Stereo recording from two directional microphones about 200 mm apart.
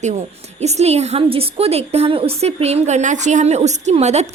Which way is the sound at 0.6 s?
35° right (ahead or behind).